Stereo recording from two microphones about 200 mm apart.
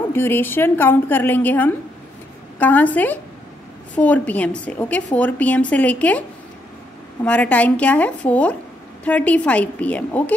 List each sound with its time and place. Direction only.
0.1 s a woman's voice: 10° left (ahead or behind)
7.2 s a woman's voice: 5° left (ahead or behind)